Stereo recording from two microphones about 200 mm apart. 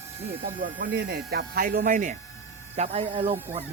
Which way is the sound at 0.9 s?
55° right (ahead or behind).